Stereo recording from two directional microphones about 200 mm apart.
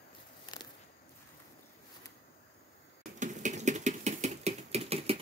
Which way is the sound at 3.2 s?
40° right (ahead or behind).